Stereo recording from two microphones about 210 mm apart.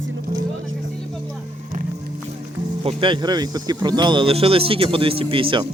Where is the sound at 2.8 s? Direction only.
25° right (ahead or behind).